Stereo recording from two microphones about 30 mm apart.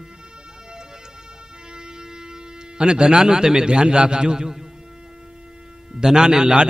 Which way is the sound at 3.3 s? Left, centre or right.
Right.